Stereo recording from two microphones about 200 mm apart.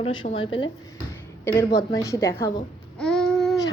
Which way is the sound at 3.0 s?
5° left (ahead or behind).